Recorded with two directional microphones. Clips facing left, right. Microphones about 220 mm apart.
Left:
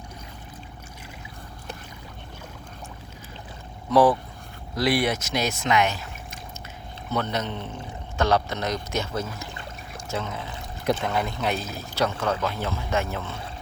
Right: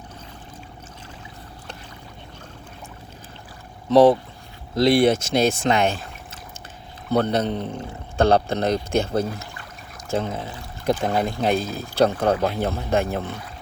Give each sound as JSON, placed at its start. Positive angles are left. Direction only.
{"t": 3.8, "sound": "speech", "side_deg": -25}
{"t": 7.2, "sound": "speech", "side_deg": -35}
{"t": 12.5, "sound": "speech", "side_deg": -55}